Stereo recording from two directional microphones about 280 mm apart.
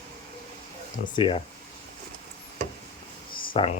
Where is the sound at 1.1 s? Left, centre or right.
Centre.